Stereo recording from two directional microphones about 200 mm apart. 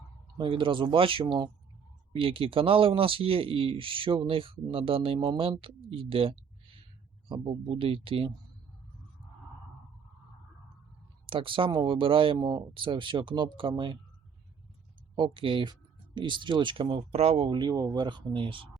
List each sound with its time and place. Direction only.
0.3 s speech: 25° right (ahead or behind)
11.3 s speech: 25° right (ahead or behind)
15.1 s speech: 25° right (ahead or behind)